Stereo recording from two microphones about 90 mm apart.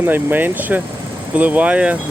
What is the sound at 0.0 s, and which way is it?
Speech, 20° right (ahead or behind).